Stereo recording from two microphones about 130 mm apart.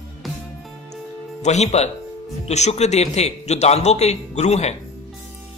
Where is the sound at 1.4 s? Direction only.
60° left (ahead or behind).